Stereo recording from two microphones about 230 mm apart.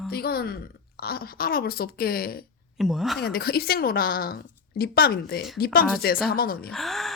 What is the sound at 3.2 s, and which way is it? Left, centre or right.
Speech, left.